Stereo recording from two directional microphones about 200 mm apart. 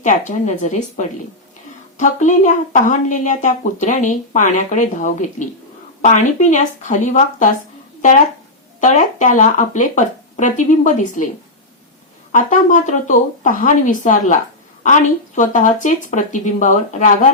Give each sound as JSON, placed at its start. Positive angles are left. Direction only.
{"t": 0.0, "sound": "a woman's voice", "side_deg": 40}
{"t": 8.8, "sound": "a woman's voice", "side_deg": 40}
{"t": 12.3, "sound": "a woman's voice", "side_deg": 40}
{"t": 15.4, "sound": "a woman's voice", "side_deg": 40}